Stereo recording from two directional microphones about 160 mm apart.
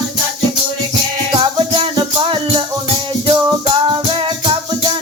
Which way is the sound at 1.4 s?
35° right (ahead or behind).